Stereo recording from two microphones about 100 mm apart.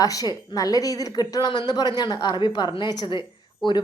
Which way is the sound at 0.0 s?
35° left (ahead or behind).